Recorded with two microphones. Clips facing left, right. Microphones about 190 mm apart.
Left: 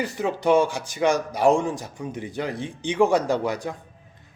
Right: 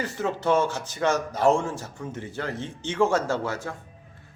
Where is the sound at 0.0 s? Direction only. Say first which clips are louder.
Left 3 dB; 15° left (ahead or behind).